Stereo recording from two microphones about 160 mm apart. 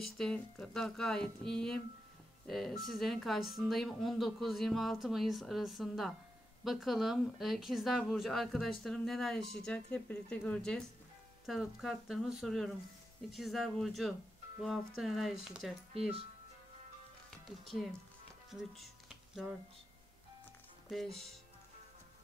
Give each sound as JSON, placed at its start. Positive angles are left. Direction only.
{"t": 0.0, "sound": "speech", "side_deg": 5}
{"t": 15.9, "sound": "speech", "side_deg": -35}
{"t": 17.5, "sound": "speech", "side_deg": 0}
{"t": 18.5, "sound": "a sound", "side_deg": 0}
{"t": 20.9, "sound": "speech", "side_deg": 0}